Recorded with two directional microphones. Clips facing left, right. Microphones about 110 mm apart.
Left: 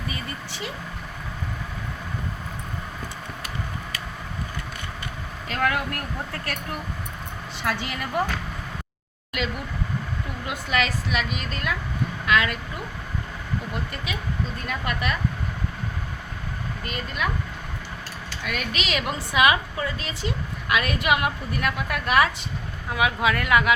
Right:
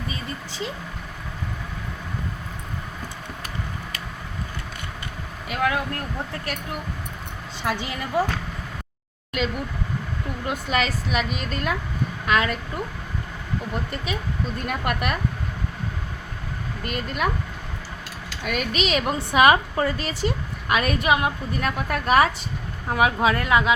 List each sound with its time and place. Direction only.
5.5 s speech: 15° right (ahead or behind)
10.4 s a woman's voice: 40° right (ahead or behind)
14.7 s speech: 50° right (ahead or behind)
16.8 s speech: 50° right (ahead or behind)
18.4 s a woman's voice: 40° right (ahead or behind); by 23.7 s 25° right (ahead or behind)